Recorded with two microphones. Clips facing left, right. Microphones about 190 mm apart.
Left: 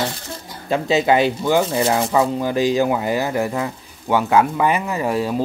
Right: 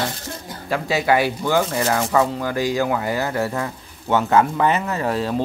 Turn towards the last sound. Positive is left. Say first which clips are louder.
# left 1 dB
turn(degrees=10)  # may be behind; listen again after turning